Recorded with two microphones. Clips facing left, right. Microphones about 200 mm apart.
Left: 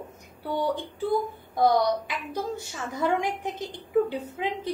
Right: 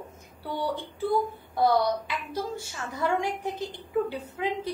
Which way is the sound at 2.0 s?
15° left (ahead or behind).